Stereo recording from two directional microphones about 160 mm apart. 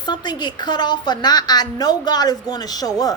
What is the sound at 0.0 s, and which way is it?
A woman's voice, 25° left (ahead or behind).